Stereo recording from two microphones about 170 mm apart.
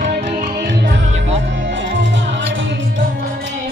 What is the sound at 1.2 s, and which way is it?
Music, 90° right.